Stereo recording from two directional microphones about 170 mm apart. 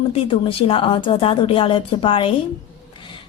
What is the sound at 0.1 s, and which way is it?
A woman's voice, 30° left (ahead or behind).